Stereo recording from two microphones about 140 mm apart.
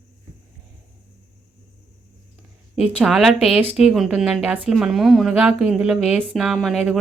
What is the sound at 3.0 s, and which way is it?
A woman's voice, centre (ahead or behind).